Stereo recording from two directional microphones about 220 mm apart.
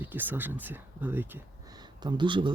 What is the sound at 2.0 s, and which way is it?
Speech, 20° right (ahead or behind).